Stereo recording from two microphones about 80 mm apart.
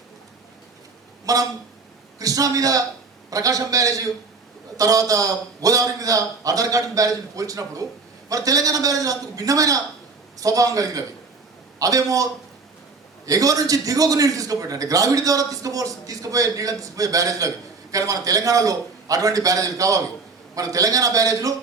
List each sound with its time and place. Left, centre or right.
1.2 s a man's voice: right